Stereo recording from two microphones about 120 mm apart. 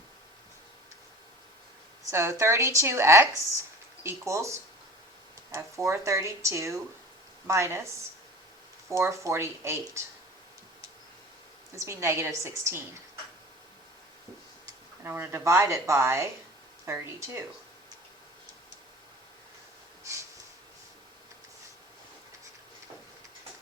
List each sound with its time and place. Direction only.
2.0 s speech: 25° right (ahead or behind)
8.9 s speech: 25° right (ahead or behind)
11.7 s speech: 25° right (ahead or behind)
15.0 s speech: 20° right (ahead or behind)